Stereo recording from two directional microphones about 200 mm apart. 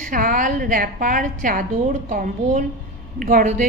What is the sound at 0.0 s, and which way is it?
A woman's voice, 45° right (ahead or behind).